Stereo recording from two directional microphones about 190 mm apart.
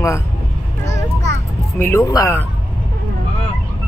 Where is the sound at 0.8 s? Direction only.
15° left (ahead or behind).